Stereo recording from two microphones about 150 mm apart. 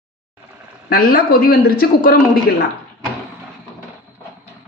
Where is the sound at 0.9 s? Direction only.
80° left.